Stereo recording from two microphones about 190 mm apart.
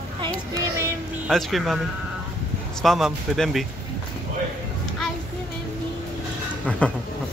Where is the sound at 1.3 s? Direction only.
Centre (ahead or behind).